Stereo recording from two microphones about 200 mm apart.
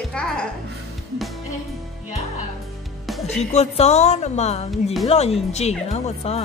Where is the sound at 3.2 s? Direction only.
35° left (ahead or behind).